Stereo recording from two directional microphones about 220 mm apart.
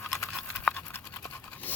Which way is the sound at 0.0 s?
5° left (ahead or behind).